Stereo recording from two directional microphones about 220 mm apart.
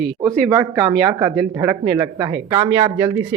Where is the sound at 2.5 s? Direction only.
20° right (ahead or behind).